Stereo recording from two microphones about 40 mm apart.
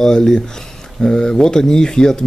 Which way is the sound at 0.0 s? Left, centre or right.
Centre.